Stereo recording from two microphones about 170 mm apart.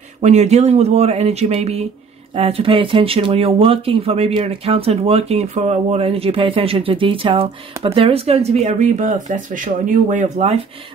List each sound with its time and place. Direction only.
0.2 s speech: 45° right (ahead or behind)